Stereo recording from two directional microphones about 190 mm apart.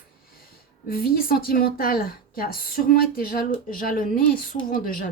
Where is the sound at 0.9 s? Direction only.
50° left (ahead or behind).